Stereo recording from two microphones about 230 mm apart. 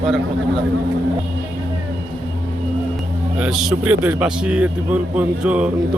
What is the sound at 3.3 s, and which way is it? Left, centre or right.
A man's voice, centre.